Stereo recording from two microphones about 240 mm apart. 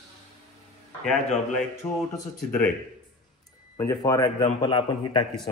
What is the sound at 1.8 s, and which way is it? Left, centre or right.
Speech, centre.